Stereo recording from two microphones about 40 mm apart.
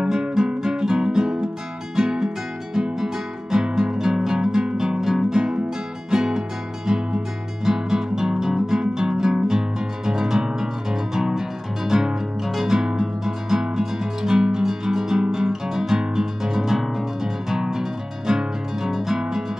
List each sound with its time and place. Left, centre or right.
0.0 s music: centre
7.6 s music: centre